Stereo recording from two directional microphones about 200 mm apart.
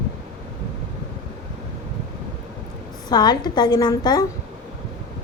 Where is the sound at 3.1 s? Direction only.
20° left (ahead or behind).